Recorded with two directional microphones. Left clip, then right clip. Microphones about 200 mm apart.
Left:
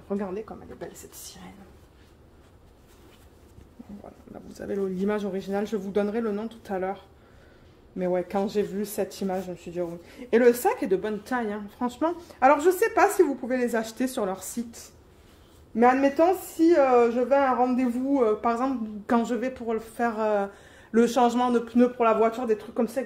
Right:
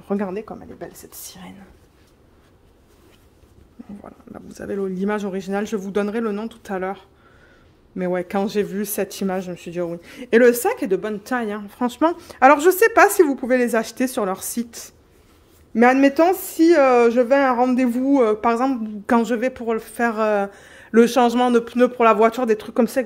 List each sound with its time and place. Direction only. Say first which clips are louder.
0.1 s speech: right 6 dB; 65° right (ahead or behind)
4.0 s speech: right 4 dB; 35° right (ahead or behind)
8.0 s speech: right 4 dB; 40° right (ahead or behind); by 23.0 s 60° right (ahead or behind)